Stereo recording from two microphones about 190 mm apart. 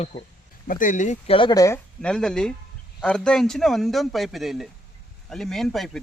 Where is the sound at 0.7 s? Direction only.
45° left (ahead or behind).